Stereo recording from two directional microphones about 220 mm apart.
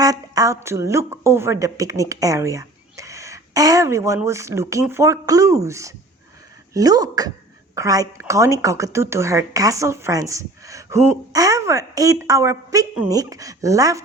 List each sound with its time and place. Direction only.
0.0 s speech: 15° right (ahead or behind)